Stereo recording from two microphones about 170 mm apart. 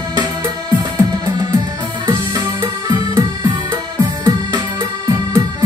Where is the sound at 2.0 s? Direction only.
20° right (ahead or behind).